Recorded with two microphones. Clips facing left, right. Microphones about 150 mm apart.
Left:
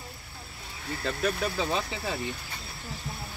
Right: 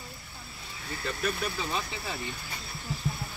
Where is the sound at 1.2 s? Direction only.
75° left (ahead or behind).